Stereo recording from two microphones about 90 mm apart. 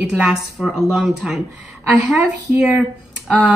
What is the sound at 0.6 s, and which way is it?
Speech, centre (ahead or behind).